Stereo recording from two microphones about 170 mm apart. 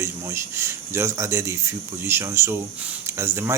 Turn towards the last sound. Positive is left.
turn(degrees=-15)  # may be behind; listen again after turning